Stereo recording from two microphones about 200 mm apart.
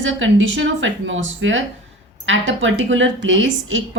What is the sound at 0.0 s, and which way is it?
A woman's voice, 70° right (ahead or behind).